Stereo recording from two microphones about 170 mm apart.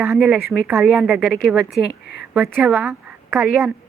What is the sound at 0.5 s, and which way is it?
Speech, 5° right (ahead or behind).